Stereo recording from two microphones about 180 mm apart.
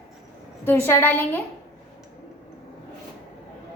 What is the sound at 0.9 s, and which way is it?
Speech, 10° left (ahead or behind).